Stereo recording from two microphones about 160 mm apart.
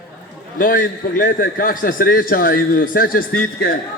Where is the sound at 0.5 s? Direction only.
60° left (ahead or behind).